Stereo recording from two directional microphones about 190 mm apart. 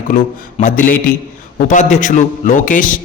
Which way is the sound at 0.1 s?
40° left (ahead or behind).